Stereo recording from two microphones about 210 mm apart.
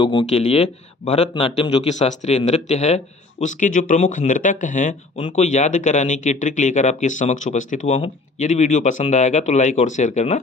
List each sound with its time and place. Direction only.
0.0 s speech: 25° left (ahead or behind)